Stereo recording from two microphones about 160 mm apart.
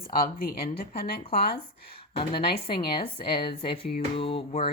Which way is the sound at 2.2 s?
30° left (ahead or behind).